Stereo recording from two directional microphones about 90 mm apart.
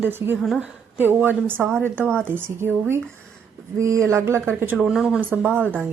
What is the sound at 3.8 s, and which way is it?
Speech, 35° right (ahead or behind).